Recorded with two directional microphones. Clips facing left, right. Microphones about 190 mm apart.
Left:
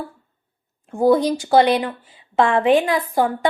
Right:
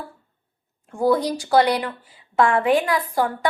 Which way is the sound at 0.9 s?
20° left (ahead or behind).